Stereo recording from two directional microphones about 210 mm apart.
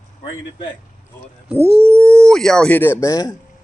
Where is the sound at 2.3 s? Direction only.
Centre (ahead or behind).